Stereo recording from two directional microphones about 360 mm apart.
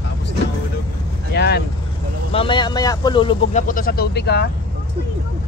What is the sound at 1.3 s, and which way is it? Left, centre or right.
Vehicle, left.